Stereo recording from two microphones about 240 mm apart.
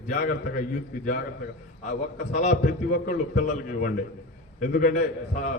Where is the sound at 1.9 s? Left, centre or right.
Left.